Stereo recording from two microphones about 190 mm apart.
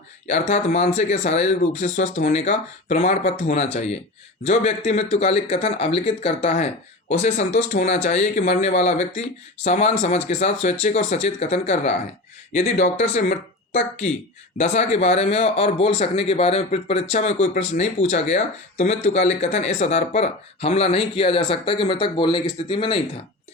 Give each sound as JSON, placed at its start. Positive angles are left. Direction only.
{"t": 0.3, "sound": "speech", "side_deg": 40}
{"t": 14.6, "sound": "speech", "side_deg": 35}